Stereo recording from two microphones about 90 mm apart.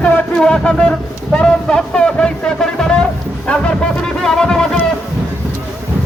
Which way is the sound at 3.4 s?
10° left (ahead or behind).